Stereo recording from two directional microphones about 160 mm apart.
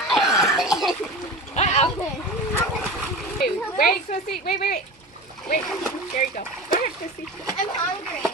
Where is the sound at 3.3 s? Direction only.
65° left (ahead or behind).